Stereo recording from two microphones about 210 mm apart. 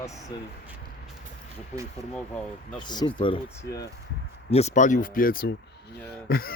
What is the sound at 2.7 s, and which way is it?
Speech, 20° left (ahead or behind).